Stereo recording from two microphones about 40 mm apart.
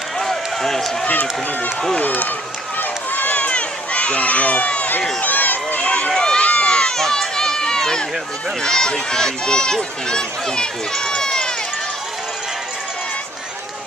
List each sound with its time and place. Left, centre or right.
0.2 s run: centre
2.0 s speech: left
2.8 s run: left
6.1 s run: centre
8.6 s speech: centre